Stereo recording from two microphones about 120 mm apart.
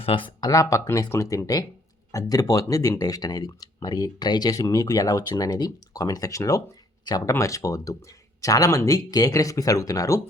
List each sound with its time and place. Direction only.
0.0 s speech: 50° left (ahead or behind)
0.4 s speech: 30° left (ahead or behind)